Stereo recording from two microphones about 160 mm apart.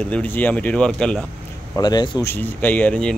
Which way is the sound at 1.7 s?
25° left (ahead or behind).